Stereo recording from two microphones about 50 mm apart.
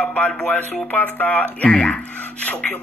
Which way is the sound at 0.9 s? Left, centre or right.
Left.